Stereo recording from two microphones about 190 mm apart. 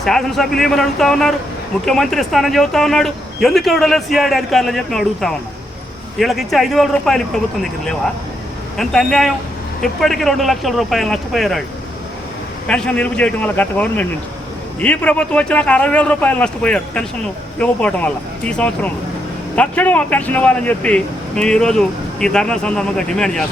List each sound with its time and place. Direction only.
0.0 s speech: centre (ahead or behind)
12.6 s a man's voice: 5° left (ahead or behind)